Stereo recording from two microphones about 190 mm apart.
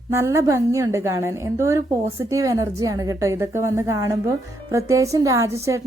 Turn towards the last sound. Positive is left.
turn(degrees=-15)  # may be behind; listen again after turning